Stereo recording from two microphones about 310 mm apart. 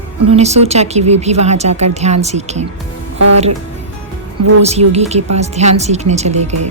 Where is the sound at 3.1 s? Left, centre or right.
Right.